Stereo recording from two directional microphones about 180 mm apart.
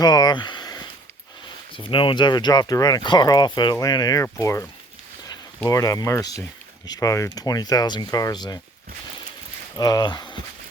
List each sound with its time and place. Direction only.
0.0 s a sound: 20° left (ahead or behind)
1.7 s speech: 30° left (ahead or behind)
5.6 s speech: 20° left (ahead or behind)
9.7 s speech: 20° left (ahead or behind)